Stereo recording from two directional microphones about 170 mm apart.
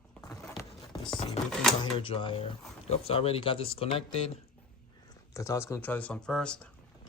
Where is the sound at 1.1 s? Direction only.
30° left (ahead or behind).